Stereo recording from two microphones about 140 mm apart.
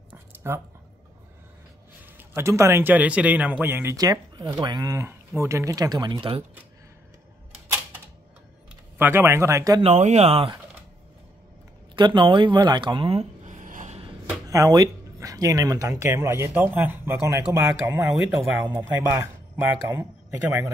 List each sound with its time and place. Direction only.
0.1 s a sound: 15° right (ahead or behind)
2.1 s speech: 20° right (ahead or behind); by 6.4 s 35° right (ahead or behind)
8.9 s speech: 15° right (ahead or behind)
9.8 s speech: 55° right (ahead or behind)
11.9 s speech: 35° right (ahead or behind); by 13.9 s 65° right (ahead or behind)
14.5 s speech: 25° right (ahead or behind)